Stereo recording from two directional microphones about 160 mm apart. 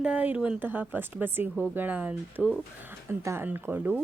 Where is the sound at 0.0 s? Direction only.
10° right (ahead or behind).